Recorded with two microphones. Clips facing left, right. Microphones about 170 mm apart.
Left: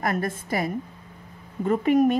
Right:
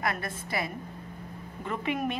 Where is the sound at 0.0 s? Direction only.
45° left (ahead or behind).